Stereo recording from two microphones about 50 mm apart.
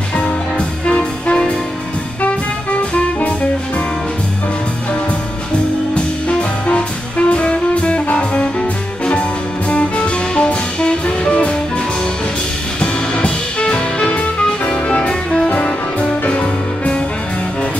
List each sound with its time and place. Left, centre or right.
0.1 s music: left
2.9 s music: left
5.9 s music: left
12.8 s music: centre